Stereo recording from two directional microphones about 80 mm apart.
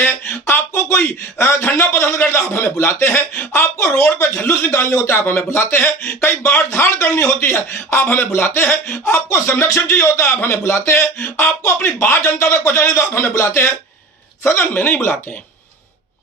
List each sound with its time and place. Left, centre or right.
0.0 s a man's voice: left
5.2 s a man's voice: left